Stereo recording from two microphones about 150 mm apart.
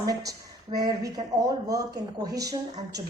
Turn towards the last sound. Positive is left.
turn(degrees=-25)  # may be behind; listen again after turning